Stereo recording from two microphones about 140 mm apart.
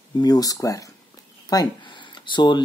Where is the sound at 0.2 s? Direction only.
25° left (ahead or behind).